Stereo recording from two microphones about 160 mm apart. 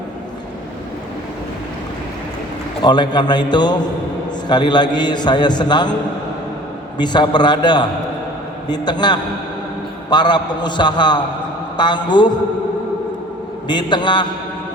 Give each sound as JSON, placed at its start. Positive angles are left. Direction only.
{"t": 2.8, "sound": "a man's voice", "side_deg": 25}
{"t": 7.0, "sound": "a man's voice", "side_deg": 25}
{"t": 13.7, "sound": "a man's voice", "side_deg": 30}